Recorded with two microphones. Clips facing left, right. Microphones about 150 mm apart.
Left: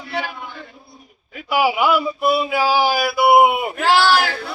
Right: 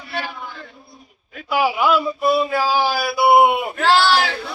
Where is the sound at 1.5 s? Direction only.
5° left (ahead or behind).